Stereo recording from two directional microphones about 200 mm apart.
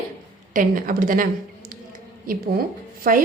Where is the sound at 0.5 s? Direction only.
40° right (ahead or behind).